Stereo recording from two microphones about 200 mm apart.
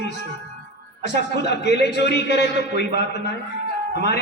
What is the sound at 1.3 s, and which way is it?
A man's voice, 55° left (ahead or behind).